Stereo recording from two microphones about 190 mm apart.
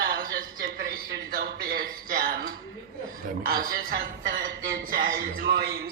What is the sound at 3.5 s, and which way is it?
A man's voice, 50° right (ahead or behind).